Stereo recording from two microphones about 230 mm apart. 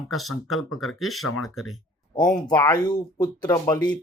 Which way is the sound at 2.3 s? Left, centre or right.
Centre.